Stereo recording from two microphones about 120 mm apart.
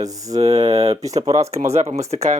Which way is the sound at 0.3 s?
60° right (ahead or behind).